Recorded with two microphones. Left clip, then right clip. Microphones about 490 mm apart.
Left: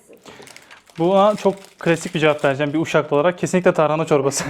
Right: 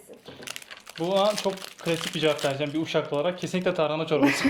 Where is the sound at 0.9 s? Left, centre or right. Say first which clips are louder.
Left 8 dB; left.